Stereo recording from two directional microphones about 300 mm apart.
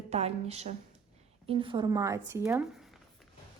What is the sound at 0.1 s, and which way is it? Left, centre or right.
A woman's voice, right.